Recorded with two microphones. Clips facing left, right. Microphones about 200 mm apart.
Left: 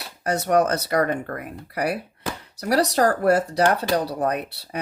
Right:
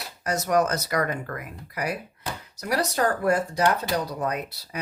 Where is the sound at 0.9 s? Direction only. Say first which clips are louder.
Left 4 dB; 30° left (ahead or behind).